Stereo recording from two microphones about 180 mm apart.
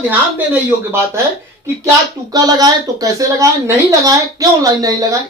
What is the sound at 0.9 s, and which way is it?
Speech, 15° right (ahead or behind).